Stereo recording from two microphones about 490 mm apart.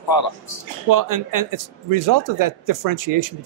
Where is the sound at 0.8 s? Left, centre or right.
Right.